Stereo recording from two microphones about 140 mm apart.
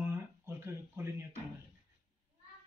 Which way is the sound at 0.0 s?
15° right (ahead or behind).